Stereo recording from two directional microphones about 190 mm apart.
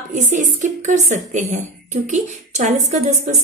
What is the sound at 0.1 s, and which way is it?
Speech, 40° right (ahead or behind).